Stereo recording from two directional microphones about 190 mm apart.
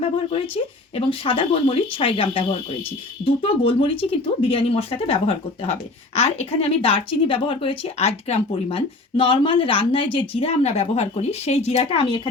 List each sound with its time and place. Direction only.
0.5 s speech: 30° left (ahead or behind)